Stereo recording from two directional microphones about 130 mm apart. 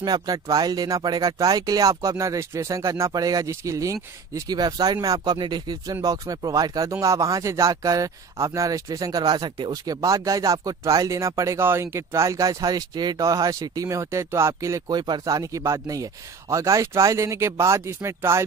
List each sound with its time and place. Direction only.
0.0 s speech: 30° right (ahead or behind)